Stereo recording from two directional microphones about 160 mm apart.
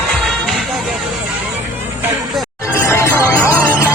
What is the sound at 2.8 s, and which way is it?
Music, 15° left (ahead or behind).